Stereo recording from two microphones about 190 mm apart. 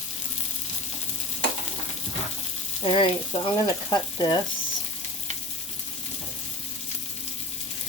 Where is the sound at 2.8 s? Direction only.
30° left (ahead or behind).